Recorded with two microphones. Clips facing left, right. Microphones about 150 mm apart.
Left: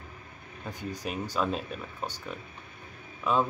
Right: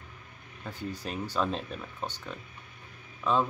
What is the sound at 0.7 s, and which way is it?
Speech, 15° left (ahead or behind).